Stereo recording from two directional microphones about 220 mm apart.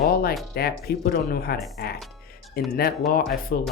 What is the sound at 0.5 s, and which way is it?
Speech, 45° left (ahead or behind).